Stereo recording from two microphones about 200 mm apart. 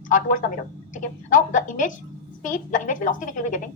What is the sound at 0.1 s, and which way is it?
A woman's voice, 40° left (ahead or behind).